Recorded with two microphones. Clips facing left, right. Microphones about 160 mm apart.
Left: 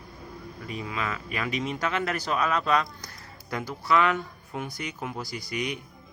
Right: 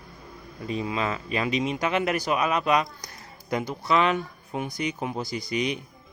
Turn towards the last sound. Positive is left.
turn(degrees=-20)  # may be behind; listen again after turning